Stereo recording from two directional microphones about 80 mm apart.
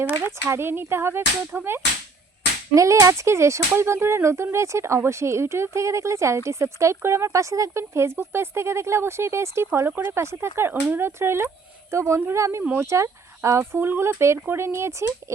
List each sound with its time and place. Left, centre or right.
0.4 s speech: right
2.7 s speech: right
13.6 s speech: right